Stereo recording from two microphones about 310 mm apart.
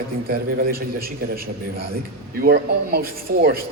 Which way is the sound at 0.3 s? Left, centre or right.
Right.